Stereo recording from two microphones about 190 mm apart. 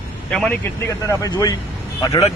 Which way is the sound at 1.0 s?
20° left (ahead or behind).